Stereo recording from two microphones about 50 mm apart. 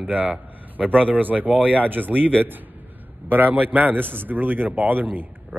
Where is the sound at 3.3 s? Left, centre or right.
Right.